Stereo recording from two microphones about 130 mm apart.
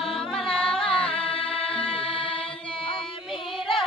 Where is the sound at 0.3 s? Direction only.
5° left (ahead or behind).